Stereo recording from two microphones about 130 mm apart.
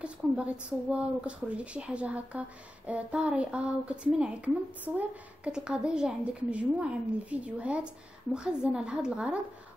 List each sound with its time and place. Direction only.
0.0 s a woman's voice: 10° right (ahead or behind)